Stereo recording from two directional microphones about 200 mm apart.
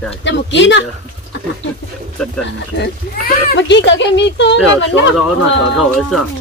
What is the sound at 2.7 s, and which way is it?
A child's voice, 50° left (ahead or behind).